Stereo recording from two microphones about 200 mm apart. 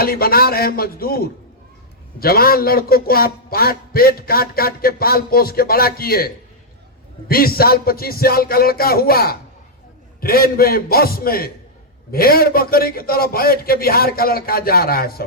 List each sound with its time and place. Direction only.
0.0 s a man's voice: 50° left (ahead or behind)